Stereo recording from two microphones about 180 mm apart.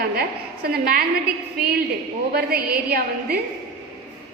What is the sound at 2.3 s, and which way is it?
A woman's voice, 55° right (ahead or behind).